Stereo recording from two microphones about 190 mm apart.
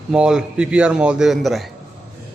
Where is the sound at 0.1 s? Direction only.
5° right (ahead or behind).